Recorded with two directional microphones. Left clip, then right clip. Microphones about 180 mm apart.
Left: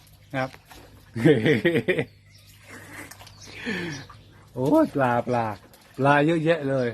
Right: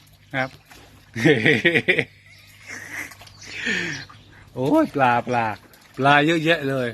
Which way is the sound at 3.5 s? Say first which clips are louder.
Right 7 dB; 10° left (ahead or behind).